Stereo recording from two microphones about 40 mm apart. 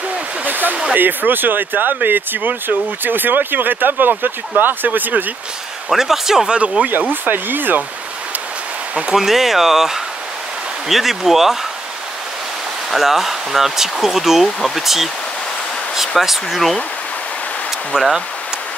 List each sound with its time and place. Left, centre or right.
0.5 s a sound: right
0.9 s speech: right
5.9 s speech: centre
6.5 s speech: right
6.9 s speech: right
9.1 s speech: centre
12.9 s speech: centre
16.2 s speech: centre
17.9 s speech: centre